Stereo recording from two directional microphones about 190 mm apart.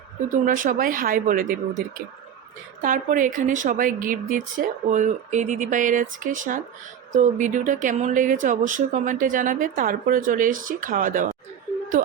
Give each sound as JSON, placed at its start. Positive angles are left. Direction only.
{"t": 0.4, "sound": "speech", "side_deg": -45}
{"t": 2.8, "sound": "speech", "side_deg": -45}